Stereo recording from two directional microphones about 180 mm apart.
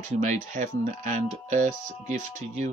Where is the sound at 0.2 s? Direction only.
45° right (ahead or behind).